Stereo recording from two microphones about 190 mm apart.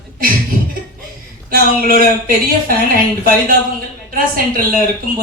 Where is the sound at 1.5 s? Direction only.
50° right (ahead or behind).